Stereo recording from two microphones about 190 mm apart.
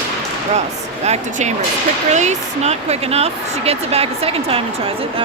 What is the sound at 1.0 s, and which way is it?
Speech, 35° right (ahead or behind).